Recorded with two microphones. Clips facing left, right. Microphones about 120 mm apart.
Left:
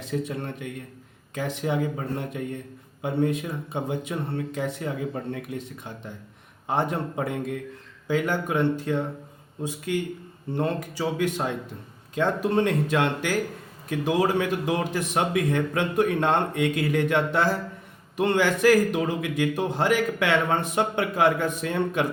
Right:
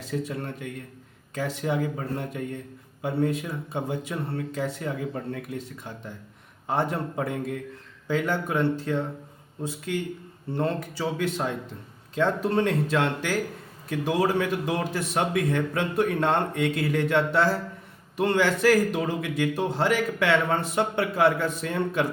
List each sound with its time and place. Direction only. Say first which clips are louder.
0.1 s a man's voice: left 1 dB; 20° left (ahead or behind)